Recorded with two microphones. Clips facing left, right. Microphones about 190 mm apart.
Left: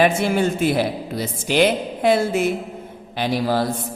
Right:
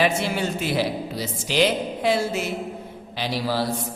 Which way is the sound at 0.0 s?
50° left (ahead or behind).